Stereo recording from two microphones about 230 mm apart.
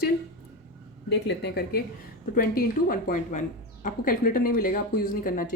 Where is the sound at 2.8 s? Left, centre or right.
Left.